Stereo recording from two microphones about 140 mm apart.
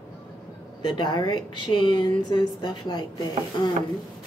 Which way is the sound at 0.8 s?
30° left (ahead or behind).